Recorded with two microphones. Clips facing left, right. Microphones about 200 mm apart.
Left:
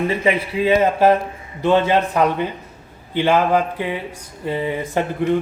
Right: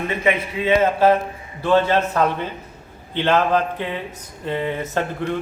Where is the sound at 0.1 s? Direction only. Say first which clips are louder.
Left 2 dB; 35° left (ahead or behind).